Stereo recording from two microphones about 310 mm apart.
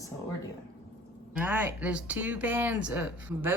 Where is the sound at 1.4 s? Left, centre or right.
Centre.